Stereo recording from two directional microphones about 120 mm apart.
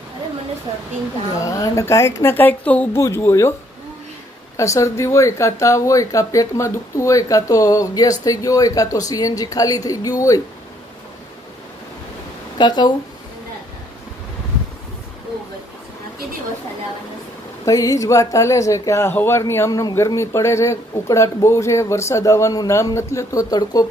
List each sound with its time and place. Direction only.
1.4 s speech: 25° left (ahead or behind)
4.6 s speech: 25° left (ahead or behind)
12.5 s speech: 35° left (ahead or behind)
17.6 s speech: 30° left (ahead or behind)